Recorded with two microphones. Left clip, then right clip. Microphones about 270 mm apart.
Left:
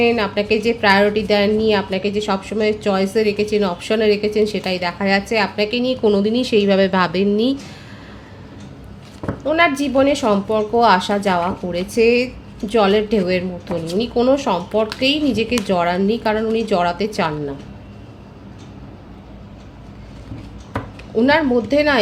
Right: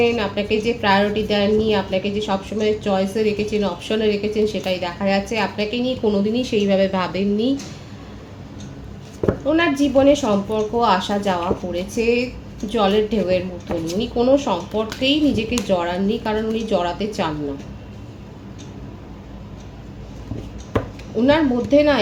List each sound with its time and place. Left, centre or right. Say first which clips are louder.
0.0 s a woman's voice: left 2 dB; left
9.5 s a woman's voice: left 3 dB; left
21.2 s a woman's voice: left 2 dB; left